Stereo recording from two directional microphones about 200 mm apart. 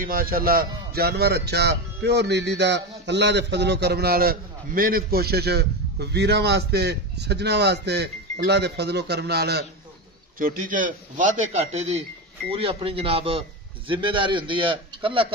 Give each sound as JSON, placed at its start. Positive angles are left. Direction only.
{"t": 0.0, "sound": "speech", "side_deg": -45}
{"t": 10.4, "sound": "a man's voice", "side_deg": -40}